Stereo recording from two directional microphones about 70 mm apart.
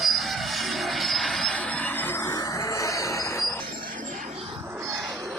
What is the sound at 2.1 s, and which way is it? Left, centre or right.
Music, left.